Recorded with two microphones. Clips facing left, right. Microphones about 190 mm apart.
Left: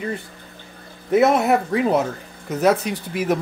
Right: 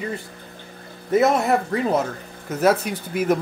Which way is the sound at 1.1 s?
Centre (ahead or behind).